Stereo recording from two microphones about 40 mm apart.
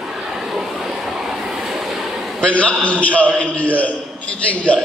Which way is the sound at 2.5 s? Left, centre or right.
Left.